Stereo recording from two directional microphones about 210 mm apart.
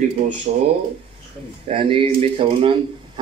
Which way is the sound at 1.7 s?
25° right (ahead or behind).